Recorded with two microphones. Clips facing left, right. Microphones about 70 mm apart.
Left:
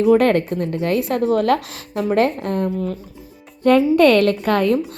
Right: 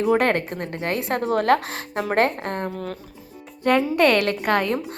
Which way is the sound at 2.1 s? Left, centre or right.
Right.